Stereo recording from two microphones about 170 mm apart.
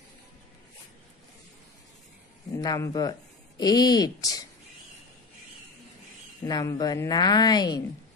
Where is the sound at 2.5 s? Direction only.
20° left (ahead or behind).